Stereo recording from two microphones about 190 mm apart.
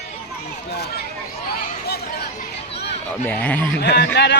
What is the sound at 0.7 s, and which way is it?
Children playing, 60° left (ahead or behind).